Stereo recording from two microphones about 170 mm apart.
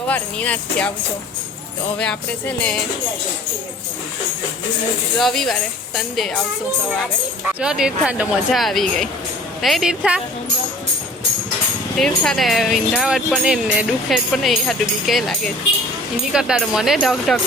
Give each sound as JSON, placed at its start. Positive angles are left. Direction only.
{"t": 0.1, "sound": "speech", "side_deg": 10}
{"t": 2.0, "sound": "speech", "side_deg": 5}
{"t": 5.1, "sound": "speech", "side_deg": 5}
{"t": 7.6, "sound": "speech", "side_deg": -5}
{"t": 11.9, "sound": "speech", "side_deg": 5}